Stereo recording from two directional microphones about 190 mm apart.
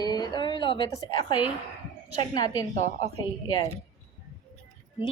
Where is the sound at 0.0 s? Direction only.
20° left (ahead or behind).